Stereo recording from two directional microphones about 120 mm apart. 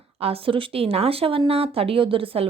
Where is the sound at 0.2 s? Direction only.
55° right (ahead or behind).